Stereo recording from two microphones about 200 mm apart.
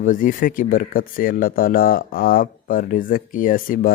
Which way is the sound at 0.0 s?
40° left (ahead or behind).